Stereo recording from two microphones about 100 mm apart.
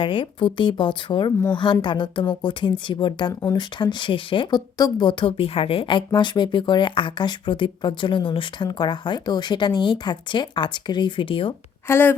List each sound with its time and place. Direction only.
0.0 s a woman's voice: 60° left (ahead or behind)
11.9 s a woman's voice: 20° left (ahead or behind)